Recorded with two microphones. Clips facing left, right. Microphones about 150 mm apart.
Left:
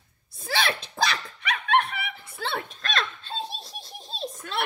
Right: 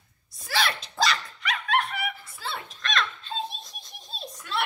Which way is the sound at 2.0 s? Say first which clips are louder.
Right 1 dB; 60° left (ahead or behind).